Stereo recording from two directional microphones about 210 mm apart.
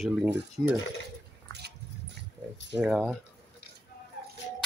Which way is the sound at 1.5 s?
55° right (ahead or behind).